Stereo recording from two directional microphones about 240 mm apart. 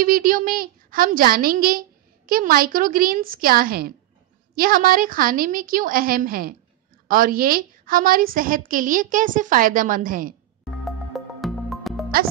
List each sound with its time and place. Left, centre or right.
0.0 s a woman's voice: right
10.7 s music: centre